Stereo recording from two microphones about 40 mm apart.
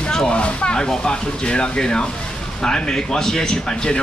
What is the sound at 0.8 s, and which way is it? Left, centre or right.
Speech, centre.